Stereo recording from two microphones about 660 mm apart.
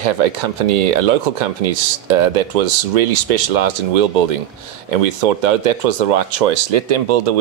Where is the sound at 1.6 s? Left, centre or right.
Right.